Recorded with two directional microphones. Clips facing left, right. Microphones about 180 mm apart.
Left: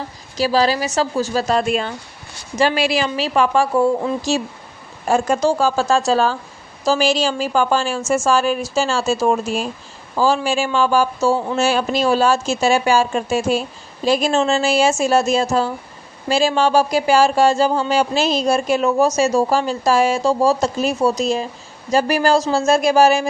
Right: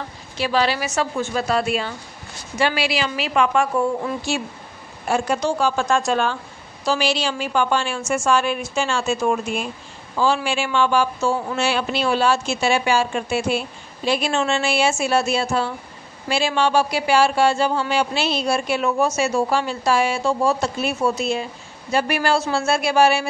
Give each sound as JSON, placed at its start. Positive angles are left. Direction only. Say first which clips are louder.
{"t": 0.4, "sound": "speech", "louder": "left 4 dB", "side_deg": 35}